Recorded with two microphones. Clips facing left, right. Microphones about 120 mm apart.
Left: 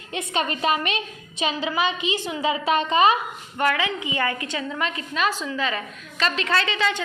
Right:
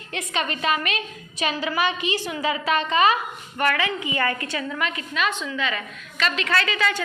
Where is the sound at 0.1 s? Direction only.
30° left (ahead or behind).